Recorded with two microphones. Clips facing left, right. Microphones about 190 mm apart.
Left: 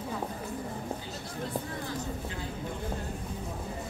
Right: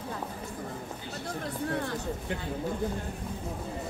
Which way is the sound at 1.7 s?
65° right (ahead or behind).